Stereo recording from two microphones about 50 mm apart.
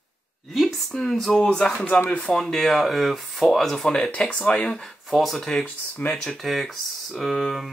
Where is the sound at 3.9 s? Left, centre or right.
Centre.